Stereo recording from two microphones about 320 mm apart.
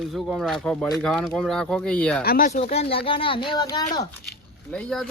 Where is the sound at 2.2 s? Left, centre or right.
Left.